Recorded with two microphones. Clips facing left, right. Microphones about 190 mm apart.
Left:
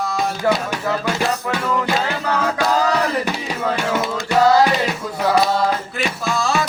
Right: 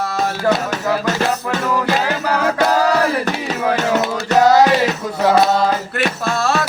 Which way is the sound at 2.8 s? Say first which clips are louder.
Right 3 dB; 10° right (ahead or behind).